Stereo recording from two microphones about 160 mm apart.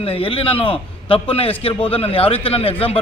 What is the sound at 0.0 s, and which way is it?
A man's voice, 35° left (ahead or behind).